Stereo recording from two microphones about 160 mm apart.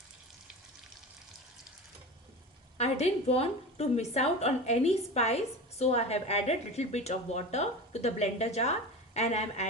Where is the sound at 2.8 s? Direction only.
40° left (ahead or behind).